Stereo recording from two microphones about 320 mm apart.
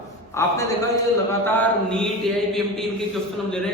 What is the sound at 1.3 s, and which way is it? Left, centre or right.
Mantra, centre.